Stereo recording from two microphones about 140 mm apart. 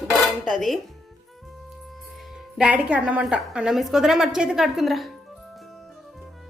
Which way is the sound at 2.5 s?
10° right (ahead or behind).